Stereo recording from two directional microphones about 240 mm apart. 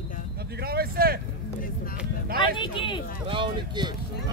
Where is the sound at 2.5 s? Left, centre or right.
Centre.